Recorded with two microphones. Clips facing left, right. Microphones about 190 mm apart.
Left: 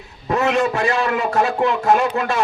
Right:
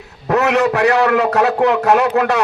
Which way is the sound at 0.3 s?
70° right (ahead or behind).